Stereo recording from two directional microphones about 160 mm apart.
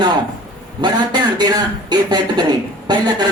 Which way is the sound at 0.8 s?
25° right (ahead or behind).